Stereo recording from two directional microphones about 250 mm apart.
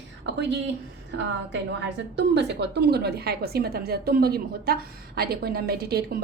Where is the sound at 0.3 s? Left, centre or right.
Right.